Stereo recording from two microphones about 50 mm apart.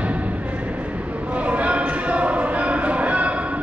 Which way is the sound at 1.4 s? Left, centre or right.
Right.